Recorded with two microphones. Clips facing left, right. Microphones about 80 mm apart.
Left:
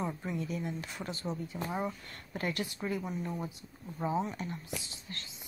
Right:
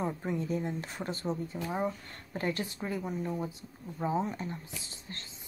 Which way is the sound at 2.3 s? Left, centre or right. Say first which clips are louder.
Right 2 dB; right.